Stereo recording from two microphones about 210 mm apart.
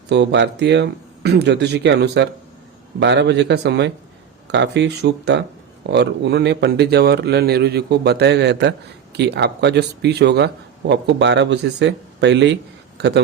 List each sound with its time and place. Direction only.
0.1 s a man's voice: 55° right (ahead or behind)